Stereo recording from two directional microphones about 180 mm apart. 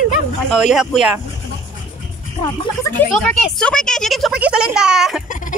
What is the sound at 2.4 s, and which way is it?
Speech, 25° left (ahead or behind).